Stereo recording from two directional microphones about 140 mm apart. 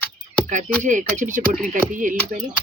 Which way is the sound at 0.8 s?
65° right (ahead or behind).